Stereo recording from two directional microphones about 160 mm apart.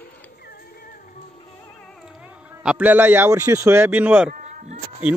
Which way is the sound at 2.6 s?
10° right (ahead or behind).